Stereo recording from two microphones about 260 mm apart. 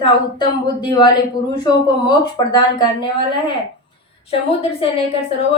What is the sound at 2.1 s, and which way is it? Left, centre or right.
Speech, centre.